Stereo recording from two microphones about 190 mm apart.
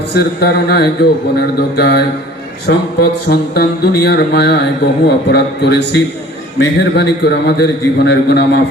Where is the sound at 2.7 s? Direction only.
75° left (ahead or behind).